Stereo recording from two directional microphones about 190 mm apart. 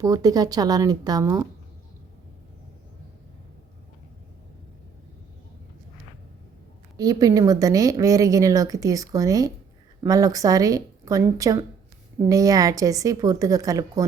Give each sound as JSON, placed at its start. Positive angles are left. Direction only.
{"t": 0.0, "sound": "speech", "side_deg": -20}
{"t": 6.9, "sound": "a woman's voice", "side_deg": -20}